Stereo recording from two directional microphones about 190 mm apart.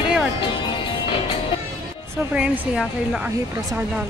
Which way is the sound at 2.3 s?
10° right (ahead or behind).